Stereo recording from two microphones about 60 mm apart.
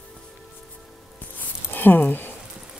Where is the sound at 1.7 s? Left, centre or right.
Left.